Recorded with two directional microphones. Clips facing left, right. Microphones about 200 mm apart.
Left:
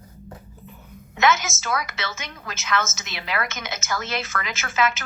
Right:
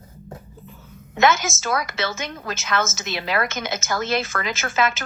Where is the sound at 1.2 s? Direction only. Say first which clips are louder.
Right 2 dB; 30° right (ahead or behind).